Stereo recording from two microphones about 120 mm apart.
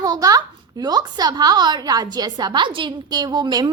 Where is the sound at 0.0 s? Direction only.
30° right (ahead or behind).